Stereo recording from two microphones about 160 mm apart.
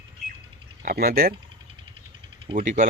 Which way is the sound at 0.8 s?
65° right (ahead or behind).